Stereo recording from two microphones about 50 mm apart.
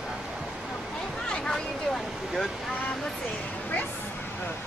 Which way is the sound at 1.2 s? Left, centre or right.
Centre.